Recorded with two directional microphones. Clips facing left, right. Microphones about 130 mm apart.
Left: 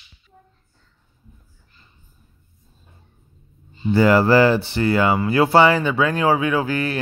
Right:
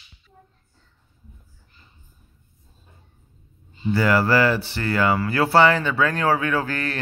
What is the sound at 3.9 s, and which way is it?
Speech, 25° left (ahead or behind).